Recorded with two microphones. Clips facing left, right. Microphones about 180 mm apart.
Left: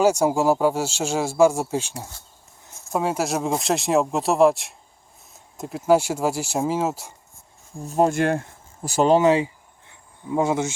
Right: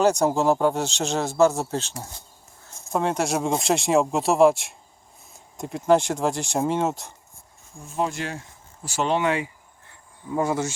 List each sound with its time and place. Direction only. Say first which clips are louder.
0.0 s speech: left 1 dB; 10° left (ahead or behind)
7.9 s speech: left 8 dB; 45° left (ahead or behind)
9.0 s speech: left 6 dB; 40° left (ahead or behind)